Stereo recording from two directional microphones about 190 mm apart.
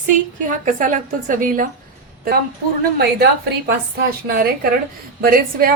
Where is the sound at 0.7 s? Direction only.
45° right (ahead or behind).